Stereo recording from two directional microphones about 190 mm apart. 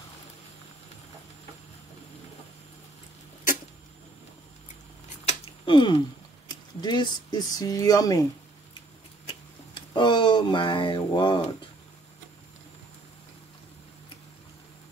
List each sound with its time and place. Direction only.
5.2 s a sound: 30° left (ahead or behind)
6.5 s speech: 20° left (ahead or behind)
9.8 s speech: 25° left (ahead or behind)